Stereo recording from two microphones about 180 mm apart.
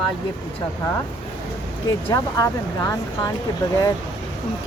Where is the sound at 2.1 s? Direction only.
15° left (ahead or behind).